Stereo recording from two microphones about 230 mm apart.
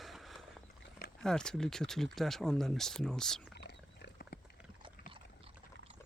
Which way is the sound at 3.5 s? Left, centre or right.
Left.